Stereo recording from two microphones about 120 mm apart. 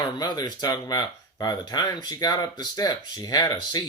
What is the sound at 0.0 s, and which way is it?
Speech, 35° left (ahead or behind).